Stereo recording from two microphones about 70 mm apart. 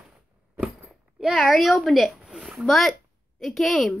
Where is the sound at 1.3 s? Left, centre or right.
Centre.